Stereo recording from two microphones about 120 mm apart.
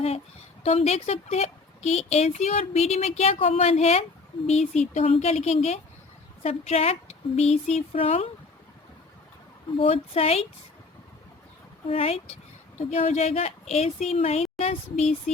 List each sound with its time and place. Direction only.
0.6 s a woman's voice: 60° left (ahead or behind)
9.7 s a woman's voice: 50° left (ahead or behind)
11.9 s a woman's voice: 55° left (ahead or behind)